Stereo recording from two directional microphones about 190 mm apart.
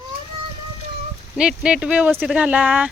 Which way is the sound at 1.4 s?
5° right (ahead or behind).